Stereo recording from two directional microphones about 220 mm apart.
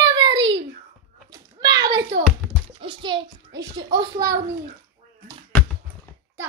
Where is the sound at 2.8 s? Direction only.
20° right (ahead or behind).